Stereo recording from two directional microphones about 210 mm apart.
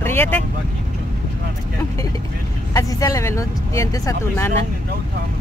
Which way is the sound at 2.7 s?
15° left (ahead or behind).